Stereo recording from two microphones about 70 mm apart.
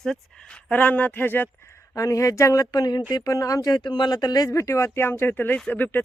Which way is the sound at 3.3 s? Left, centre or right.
Left.